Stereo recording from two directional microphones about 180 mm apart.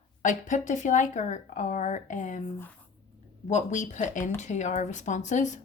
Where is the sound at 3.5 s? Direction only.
40° left (ahead or behind).